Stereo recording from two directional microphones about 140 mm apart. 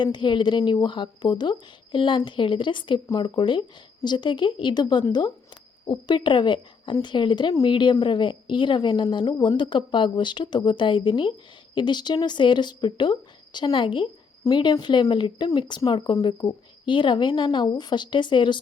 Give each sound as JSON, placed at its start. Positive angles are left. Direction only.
{"t": 0.0, "sound": "a woman's voice", "side_deg": 35}